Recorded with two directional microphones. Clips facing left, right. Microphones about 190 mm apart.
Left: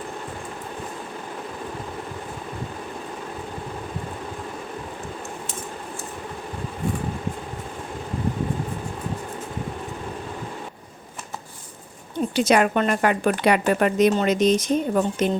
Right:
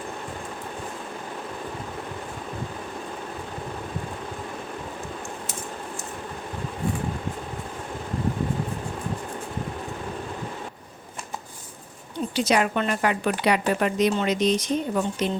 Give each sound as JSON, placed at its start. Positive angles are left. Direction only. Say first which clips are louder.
{"t": 12.4, "sound": "a woman's voice", "louder": "left 4 dB", "side_deg": 50}